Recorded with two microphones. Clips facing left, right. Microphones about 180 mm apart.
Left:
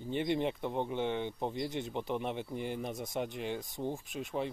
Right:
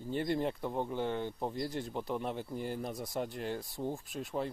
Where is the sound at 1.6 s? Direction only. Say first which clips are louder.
Left 1 dB; 20° left (ahead or behind).